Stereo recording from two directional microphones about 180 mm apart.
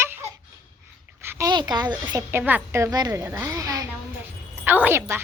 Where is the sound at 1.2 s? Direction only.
15° right (ahead or behind).